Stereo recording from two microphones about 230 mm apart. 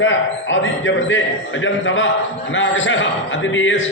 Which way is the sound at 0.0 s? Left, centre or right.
Left.